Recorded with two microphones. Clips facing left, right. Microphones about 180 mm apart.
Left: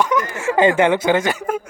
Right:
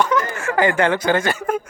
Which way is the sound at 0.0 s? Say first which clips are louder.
Left 1 dB; 15° left (ahead or behind).